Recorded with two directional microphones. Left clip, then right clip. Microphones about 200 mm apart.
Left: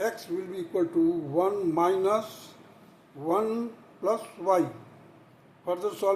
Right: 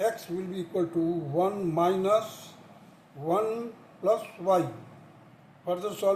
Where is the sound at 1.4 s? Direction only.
15° left (ahead or behind).